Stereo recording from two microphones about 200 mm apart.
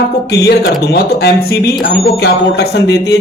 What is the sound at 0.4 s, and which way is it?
Speech, 55° left (ahead or behind).